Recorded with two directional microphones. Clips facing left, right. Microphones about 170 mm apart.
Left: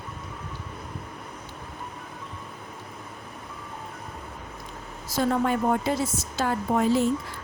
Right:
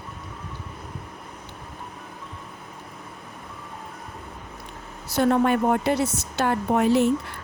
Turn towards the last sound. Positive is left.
turn(degrees=-65)  # may be behind; listen again after turning